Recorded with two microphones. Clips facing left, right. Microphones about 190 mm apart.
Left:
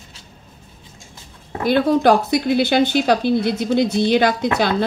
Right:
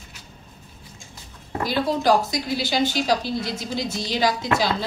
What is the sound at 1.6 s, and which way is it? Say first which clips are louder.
A woman's voice: left 6 dB; 60° left (ahead or behind).